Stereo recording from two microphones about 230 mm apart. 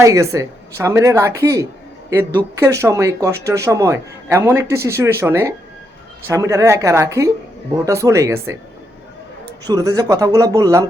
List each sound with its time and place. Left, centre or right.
0.0 s speech: centre
9.6 s speech: centre